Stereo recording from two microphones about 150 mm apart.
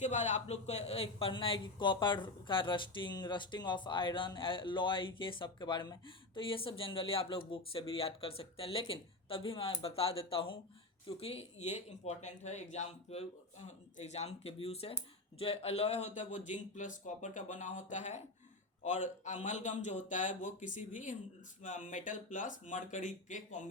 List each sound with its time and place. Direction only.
0.0 s a man's voice: 50° left (ahead or behind)